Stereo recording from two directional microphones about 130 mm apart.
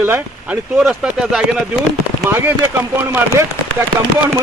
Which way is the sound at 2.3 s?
15° right (ahead or behind).